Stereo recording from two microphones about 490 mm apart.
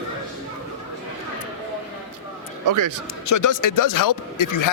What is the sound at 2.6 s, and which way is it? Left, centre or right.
Speech, right.